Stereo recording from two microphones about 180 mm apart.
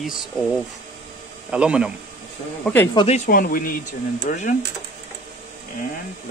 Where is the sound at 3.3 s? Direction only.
50° left (ahead or behind).